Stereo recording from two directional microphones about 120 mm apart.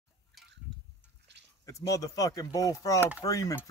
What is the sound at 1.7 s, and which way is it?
Speech, 30° left (ahead or behind).